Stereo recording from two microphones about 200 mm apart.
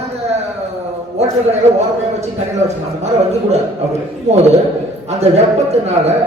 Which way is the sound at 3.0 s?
30° right (ahead or behind).